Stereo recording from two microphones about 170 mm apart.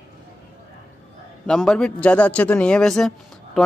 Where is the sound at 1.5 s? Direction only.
5° left (ahead or behind).